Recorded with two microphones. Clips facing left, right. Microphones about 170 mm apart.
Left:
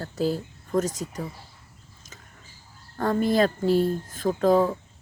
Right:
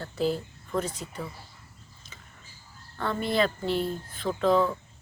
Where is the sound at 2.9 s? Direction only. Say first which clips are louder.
Left 5 dB; 45° left (ahead or behind).